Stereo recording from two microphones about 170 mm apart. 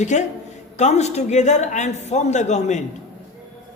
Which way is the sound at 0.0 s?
45° left (ahead or behind).